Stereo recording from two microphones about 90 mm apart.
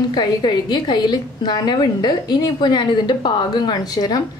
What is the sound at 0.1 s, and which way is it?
A woman's voice, 55° left (ahead or behind).